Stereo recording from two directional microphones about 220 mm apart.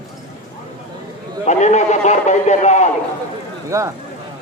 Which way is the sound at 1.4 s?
30° left (ahead or behind).